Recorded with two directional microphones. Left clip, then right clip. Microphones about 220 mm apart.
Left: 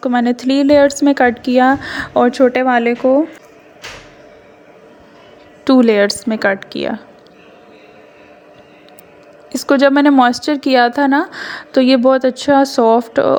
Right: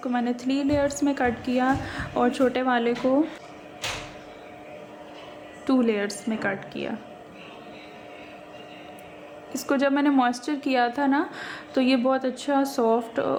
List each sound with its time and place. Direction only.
0.0 s a woman's voice: 40° left (ahead or behind)
5.6 s a woman's voice: 40° left (ahead or behind)
9.5 s a woman's voice: 40° left (ahead or behind)